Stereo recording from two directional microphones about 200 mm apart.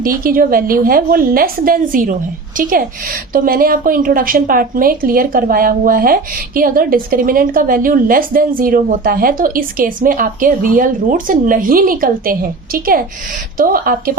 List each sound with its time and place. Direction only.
0.0 s a woman's voice: 45° right (ahead or behind)